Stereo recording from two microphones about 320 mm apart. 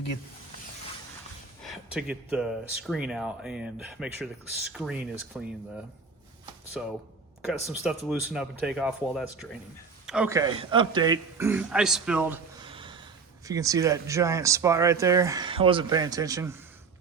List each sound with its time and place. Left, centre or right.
1.6 s speech: centre
6.8 s speech: centre
12.6 s gasp: centre
13.4 s speech: centre